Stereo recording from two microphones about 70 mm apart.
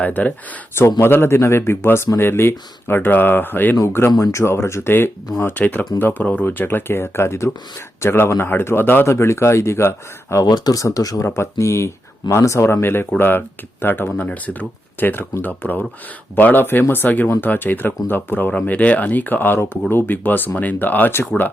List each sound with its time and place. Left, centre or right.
0.0 s speech: left
0.8 s speech: left
4.2 s speech: left
10.4 s speech: left
11.3 s speech: left
12.8 s speech: left